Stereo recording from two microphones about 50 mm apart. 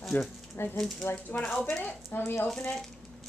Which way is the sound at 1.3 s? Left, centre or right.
Left.